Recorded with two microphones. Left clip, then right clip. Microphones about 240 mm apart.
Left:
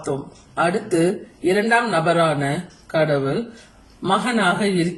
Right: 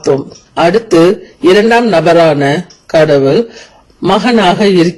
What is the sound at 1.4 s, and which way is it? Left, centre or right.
A woman's voice, right.